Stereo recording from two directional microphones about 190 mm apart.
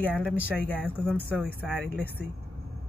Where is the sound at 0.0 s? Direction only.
5° left (ahead or behind).